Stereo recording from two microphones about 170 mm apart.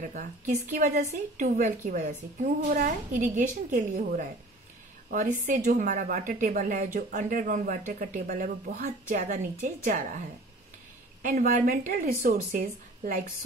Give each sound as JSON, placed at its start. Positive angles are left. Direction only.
{"t": 0.0, "sound": "a woman's voice", "side_deg": -50}
{"t": 9.2, "sound": "a woman's voice", "side_deg": -45}
{"t": 11.2, "sound": "a woman's voice", "side_deg": -55}